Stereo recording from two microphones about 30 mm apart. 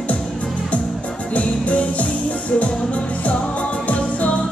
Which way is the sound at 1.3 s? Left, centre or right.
Left.